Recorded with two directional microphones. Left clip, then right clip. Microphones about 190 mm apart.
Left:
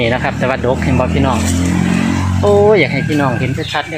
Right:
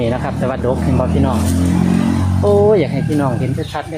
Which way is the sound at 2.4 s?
25° left (ahead or behind).